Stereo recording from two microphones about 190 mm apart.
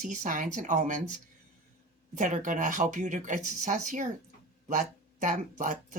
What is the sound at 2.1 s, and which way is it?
Speech, 40° right (ahead or behind).